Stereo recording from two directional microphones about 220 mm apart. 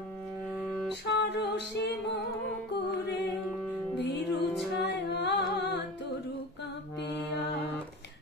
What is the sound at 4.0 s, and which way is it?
Music, 50° left (ahead or behind).